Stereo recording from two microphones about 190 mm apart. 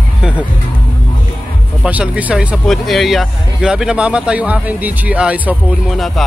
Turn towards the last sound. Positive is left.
turn(degrees=0)  # may be behind; listen again after turning